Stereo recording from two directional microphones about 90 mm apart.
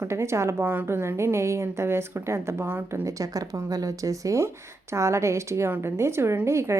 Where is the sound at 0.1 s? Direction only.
30° right (ahead or behind).